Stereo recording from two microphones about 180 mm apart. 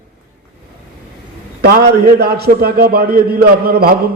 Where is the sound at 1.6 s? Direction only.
60° right (ahead or behind).